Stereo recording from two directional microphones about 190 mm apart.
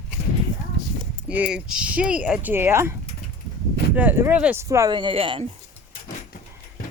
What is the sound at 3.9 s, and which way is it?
Speech, 10° right (ahead or behind).